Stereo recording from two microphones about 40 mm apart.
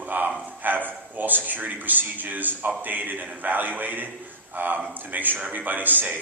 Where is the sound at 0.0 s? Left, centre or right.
Right.